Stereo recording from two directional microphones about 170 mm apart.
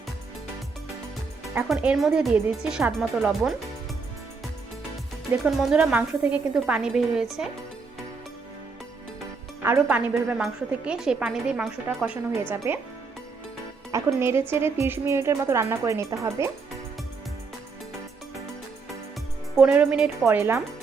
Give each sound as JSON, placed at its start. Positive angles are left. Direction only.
{"t": 1.6, "sound": "a woman's voice", "side_deg": -5}
{"t": 5.5, "sound": "a woman's voice", "side_deg": -5}
{"t": 9.6, "sound": "a woman's voice", "side_deg": -15}
{"t": 12.3, "sound": "a woman's voice", "side_deg": -10}
{"t": 13.9, "sound": "a woman's voice", "side_deg": -15}
{"t": 19.5, "sound": "a woman's voice", "side_deg": -10}